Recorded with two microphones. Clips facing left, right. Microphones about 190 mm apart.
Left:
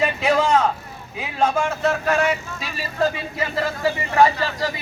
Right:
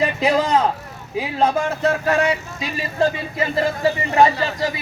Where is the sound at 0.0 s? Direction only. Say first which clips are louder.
Right 1 dB; 35° right (ahead or behind).